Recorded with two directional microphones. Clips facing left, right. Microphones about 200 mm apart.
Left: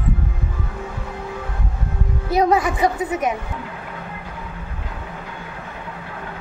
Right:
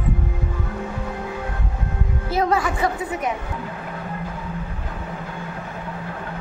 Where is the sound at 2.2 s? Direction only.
15° left (ahead or behind).